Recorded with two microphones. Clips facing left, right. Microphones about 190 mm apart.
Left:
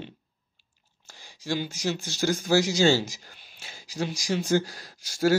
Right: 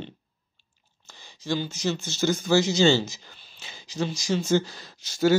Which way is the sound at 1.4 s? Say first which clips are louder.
Right 1 dB; 10° left (ahead or behind).